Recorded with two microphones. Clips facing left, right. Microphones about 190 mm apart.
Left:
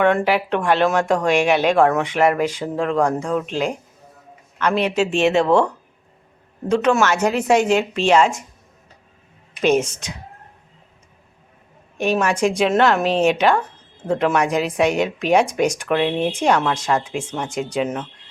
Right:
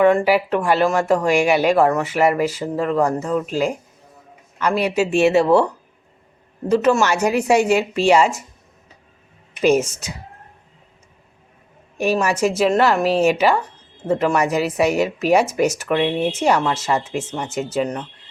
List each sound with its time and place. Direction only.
0.0 s a woman's voice: centre (ahead or behind)
9.6 s a woman's voice: 10° right (ahead or behind)
11.9 s a woman's voice: 5° right (ahead or behind)